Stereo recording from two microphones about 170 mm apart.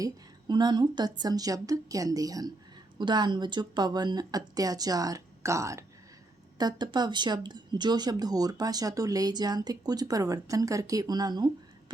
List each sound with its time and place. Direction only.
0.0 s speech: 25° right (ahead or behind)